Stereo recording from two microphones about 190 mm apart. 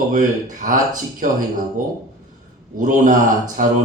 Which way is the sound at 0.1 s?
45° right (ahead or behind).